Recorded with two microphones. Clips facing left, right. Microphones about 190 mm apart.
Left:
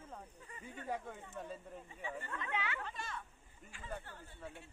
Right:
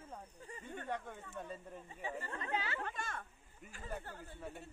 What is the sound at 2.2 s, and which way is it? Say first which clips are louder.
Chatter: right 1 dB; 35° right (ahead or behind).